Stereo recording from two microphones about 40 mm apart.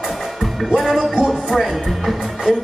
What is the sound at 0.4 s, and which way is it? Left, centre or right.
Music, centre.